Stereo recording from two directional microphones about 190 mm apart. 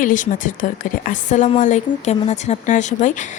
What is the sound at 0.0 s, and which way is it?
Speech, 45° left (ahead or behind).